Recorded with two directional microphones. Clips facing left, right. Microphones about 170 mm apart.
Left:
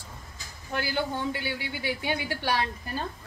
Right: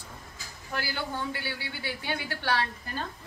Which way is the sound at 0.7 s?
20° left (ahead or behind).